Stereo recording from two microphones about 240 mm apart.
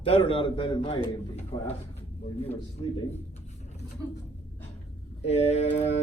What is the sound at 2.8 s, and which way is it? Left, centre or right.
Speech, centre.